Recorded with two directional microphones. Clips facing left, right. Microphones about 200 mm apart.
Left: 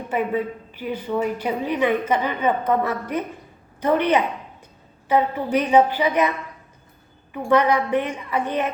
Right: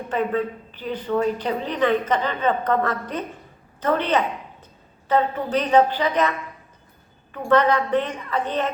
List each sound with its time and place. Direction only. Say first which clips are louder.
0.1 s a woman's voice: even; 10° left (ahead or behind)
7.4 s a woman's voice: even; 10° left (ahead or behind)